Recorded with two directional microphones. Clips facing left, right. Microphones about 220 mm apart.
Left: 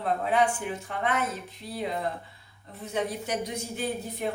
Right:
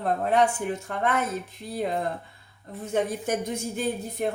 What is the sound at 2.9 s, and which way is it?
Speech, 50° right (ahead or behind).